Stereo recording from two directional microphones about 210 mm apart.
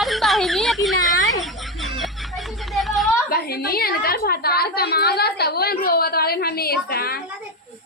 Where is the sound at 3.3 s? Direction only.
45° left (ahead or behind).